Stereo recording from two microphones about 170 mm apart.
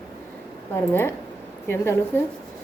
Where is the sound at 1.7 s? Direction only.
15° left (ahead or behind).